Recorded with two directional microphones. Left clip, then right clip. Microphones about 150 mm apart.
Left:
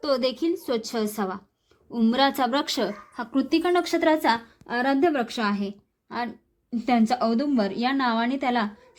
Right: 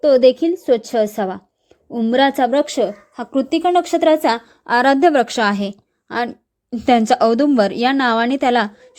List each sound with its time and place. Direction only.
0.0 s a woman's voice: 35° right (ahead or behind)
4.6 s a woman's voice: 55° right (ahead or behind); by 8.7 s 35° right (ahead or behind)